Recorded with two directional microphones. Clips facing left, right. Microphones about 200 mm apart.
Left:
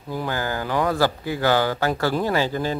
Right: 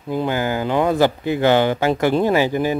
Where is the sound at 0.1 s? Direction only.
20° right (ahead or behind).